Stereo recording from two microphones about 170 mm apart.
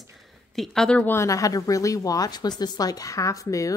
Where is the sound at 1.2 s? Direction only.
20° left (ahead or behind).